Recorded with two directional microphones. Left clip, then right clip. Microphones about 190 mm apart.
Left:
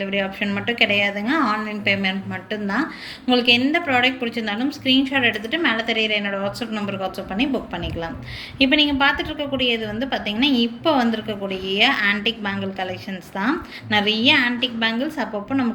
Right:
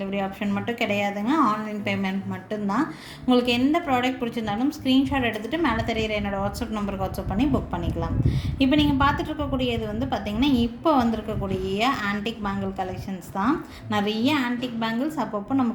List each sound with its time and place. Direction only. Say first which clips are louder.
0.0 s a woman's voice: left 5 dB; 45° right (ahead or behind)
8.5 s a woman's voice: left 4 dB; 45° right (ahead or behind)